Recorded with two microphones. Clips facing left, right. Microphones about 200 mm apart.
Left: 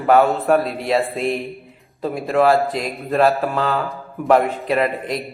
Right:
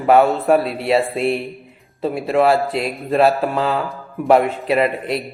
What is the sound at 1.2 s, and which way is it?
Speech, 35° right (ahead or behind).